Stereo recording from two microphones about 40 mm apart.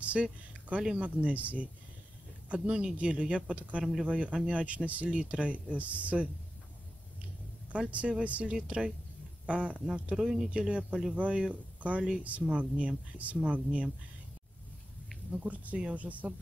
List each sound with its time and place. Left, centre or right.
0.0 s speech: right
2.5 s speech: right
7.9 s speech: right
8.5 s speech: right
10.1 s speech: centre; by 13.8 s right
15.3 s speech: right